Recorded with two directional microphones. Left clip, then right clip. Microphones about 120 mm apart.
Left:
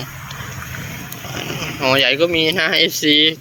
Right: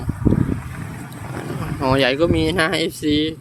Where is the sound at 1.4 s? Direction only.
45° right (ahead or behind).